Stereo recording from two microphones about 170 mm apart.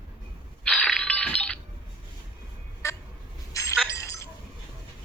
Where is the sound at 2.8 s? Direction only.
15° left (ahead or behind).